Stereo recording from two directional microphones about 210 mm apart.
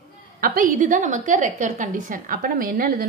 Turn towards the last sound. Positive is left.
turn(degrees=-45)  # may be behind; listen again after turning